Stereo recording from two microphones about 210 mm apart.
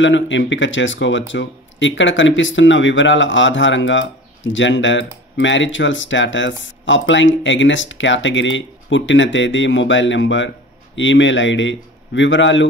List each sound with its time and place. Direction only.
0.0 s speech: 60° left (ahead or behind)